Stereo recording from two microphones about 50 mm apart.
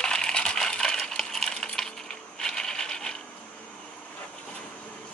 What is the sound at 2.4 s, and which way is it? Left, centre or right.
Coin, centre.